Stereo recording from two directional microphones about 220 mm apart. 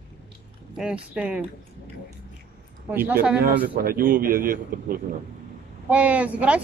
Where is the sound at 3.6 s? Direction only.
40° right (ahead or behind).